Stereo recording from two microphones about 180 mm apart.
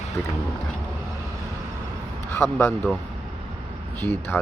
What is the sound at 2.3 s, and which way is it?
Speech, 15° left (ahead or behind).